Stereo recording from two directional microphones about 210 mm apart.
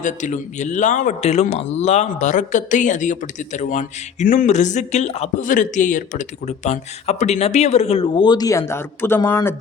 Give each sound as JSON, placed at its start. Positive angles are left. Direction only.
{"t": 0.0, "sound": "speech", "side_deg": 35}